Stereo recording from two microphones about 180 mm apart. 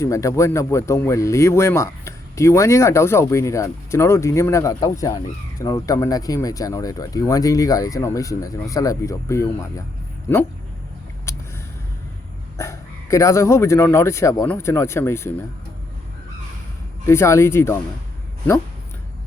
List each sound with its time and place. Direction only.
0.0 s speech: 15° left (ahead or behind)
12.5 s speech: 15° left (ahead or behind)
17.1 s speech: 15° left (ahead or behind)